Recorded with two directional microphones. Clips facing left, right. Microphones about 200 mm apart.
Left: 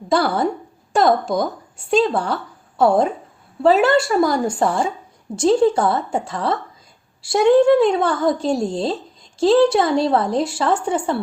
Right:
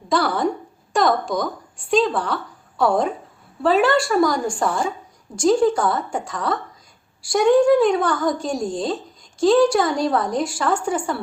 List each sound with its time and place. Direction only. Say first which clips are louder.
0.1 s a woman's voice: left 2 dB; 25° left (ahead or behind)